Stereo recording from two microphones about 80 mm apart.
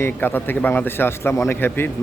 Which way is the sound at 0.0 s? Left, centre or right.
Left.